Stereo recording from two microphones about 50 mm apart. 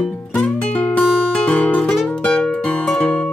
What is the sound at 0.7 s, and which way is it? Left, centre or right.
Guitar, left.